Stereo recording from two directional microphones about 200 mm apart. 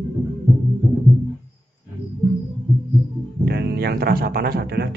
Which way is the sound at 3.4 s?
55° right (ahead or behind).